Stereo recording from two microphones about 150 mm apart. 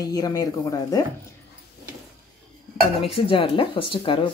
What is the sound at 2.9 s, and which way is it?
Speech, 40° left (ahead or behind).